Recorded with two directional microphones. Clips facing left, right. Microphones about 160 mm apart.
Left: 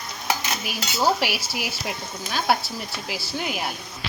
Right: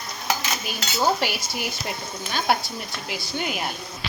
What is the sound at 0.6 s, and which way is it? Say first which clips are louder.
Cutlery: left 1 dB; 5° left (ahead or behind).